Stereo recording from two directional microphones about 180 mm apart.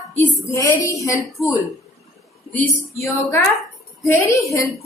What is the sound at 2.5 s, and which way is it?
Speech, 45° left (ahead or behind).